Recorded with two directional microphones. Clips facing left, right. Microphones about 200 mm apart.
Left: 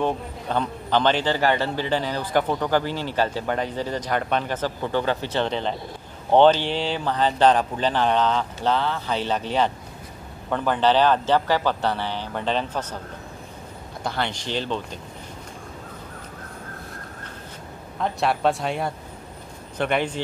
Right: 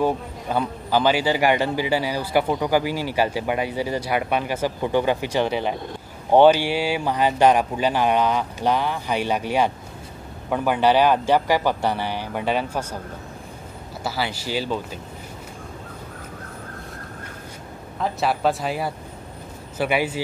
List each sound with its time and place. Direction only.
0.0 s a man's voice: 10° right (ahead or behind)
14.0 s a man's voice: 5° right (ahead or behind)
17.9 s a man's voice: centre (ahead or behind)